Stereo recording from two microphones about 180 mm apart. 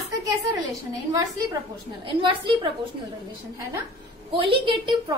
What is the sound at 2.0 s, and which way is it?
Speech, 30° right (ahead or behind).